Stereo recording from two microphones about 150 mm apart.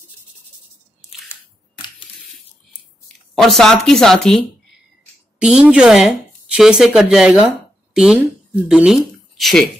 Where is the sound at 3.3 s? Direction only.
Centre (ahead or behind).